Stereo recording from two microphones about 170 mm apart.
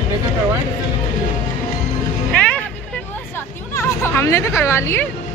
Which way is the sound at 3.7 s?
15° left (ahead or behind).